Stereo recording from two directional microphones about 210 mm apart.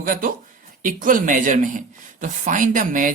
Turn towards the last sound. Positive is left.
turn(degrees=-40)  # may be behind; listen again after turning